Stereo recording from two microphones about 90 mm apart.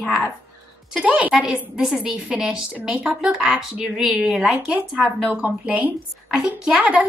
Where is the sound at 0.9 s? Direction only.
10° right (ahead or behind).